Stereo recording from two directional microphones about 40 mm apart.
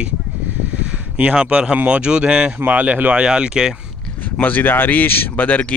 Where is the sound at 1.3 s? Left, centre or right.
Right.